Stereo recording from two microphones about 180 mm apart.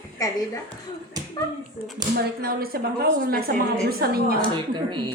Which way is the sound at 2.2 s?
60° right (ahead or behind).